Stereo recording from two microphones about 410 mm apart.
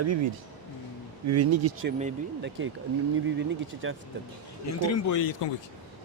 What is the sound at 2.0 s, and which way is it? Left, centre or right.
Speech, centre.